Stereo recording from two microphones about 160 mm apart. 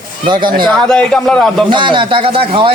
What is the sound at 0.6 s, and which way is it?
A man's voice, 5° left (ahead or behind).